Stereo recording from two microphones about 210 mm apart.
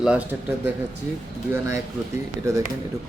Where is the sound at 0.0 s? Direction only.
5° right (ahead or behind).